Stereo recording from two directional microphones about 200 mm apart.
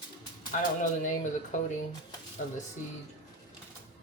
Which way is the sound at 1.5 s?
40° left (ahead or behind).